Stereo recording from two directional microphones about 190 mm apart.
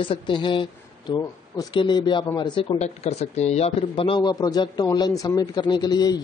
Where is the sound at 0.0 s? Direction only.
25° left (ahead or behind).